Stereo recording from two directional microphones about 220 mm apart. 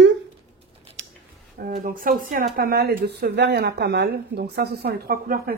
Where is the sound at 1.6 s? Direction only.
40° right (ahead or behind).